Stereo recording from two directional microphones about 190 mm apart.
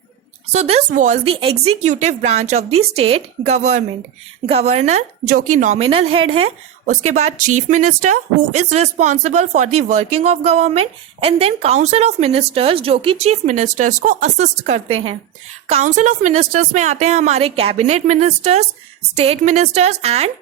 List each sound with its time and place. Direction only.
0.5 s a woman's voice: 35° right (ahead or behind)
5.9 s a woman's voice: 30° right (ahead or behind)